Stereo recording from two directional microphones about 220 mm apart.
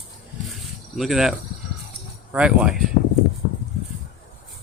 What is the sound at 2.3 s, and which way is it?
Speech, 5° right (ahead or behind).